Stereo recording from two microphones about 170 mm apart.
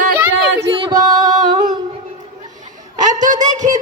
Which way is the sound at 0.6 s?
30° right (ahead or behind).